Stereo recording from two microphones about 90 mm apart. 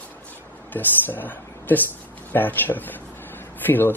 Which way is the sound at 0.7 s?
20° left (ahead or behind).